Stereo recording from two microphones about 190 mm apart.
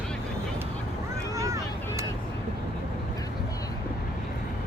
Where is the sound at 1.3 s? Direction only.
15° right (ahead or behind).